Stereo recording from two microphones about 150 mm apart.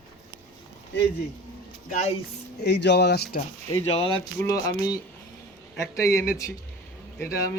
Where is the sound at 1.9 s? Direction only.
55° left (ahead or behind).